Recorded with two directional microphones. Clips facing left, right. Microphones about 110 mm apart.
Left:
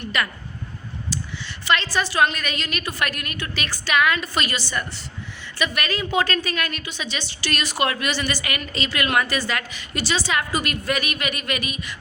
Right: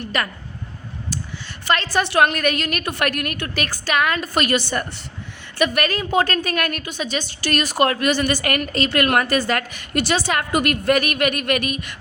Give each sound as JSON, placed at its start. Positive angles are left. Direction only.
{"t": 0.0, "sound": "speech", "side_deg": -40}
{"t": 1.6, "sound": "a woman's voice", "side_deg": -45}